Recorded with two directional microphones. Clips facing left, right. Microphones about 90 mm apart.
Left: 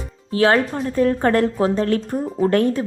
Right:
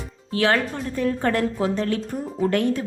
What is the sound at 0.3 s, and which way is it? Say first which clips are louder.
A woman's voice: left 5 dB; 35° left (ahead or behind).